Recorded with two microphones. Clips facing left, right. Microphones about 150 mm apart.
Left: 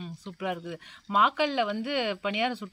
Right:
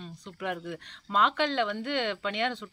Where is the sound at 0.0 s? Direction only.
5° left (ahead or behind).